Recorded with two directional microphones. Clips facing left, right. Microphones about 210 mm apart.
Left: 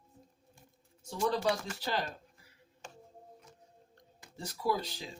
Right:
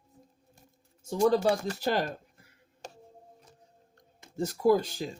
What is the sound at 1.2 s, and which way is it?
Speech, 45° right (ahead or behind).